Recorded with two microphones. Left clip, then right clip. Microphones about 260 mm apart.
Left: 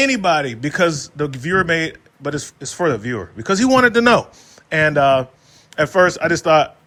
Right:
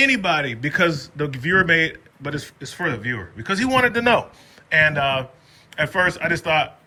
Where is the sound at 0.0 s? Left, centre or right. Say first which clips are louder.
Left 2 dB; centre.